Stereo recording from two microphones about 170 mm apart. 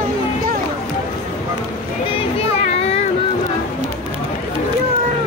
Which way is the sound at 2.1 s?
35° left (ahead or behind).